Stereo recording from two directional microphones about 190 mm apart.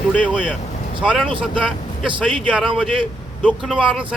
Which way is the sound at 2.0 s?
25° right (ahead or behind).